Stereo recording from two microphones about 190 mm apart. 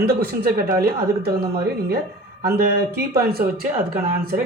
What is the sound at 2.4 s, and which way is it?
Speech, 55° right (ahead or behind).